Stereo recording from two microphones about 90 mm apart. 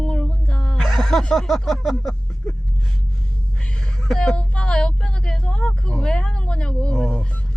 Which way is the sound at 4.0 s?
5° left (ahead or behind).